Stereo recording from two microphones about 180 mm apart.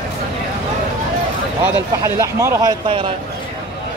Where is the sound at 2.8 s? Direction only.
30° right (ahead or behind).